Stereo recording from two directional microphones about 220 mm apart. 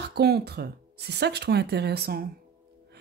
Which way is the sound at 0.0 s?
45° right (ahead or behind).